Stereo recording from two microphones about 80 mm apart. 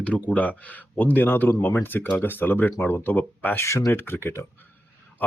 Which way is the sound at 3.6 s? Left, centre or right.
Left.